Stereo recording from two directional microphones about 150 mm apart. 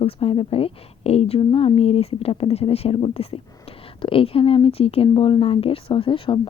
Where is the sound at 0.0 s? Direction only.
40° left (ahead or behind).